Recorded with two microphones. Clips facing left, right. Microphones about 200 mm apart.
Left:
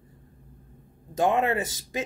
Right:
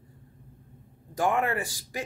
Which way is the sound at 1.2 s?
20° left (ahead or behind).